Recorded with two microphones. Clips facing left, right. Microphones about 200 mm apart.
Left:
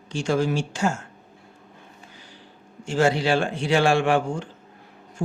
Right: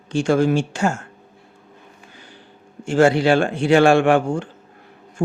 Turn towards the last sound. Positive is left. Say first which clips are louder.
# right 5 dB
turn(degrees=-55)  # may be behind; listen again after turning